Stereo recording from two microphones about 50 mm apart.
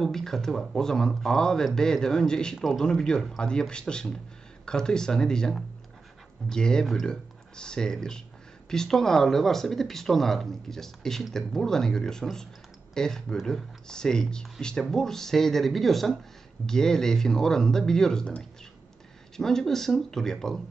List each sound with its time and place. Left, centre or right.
0.0 s speech: centre
2.5 s speech: centre
2.8 s speech: centre
19.3 s speech: centre